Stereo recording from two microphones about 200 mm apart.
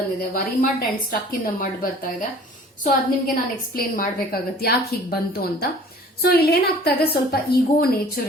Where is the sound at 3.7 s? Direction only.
50° left (ahead or behind).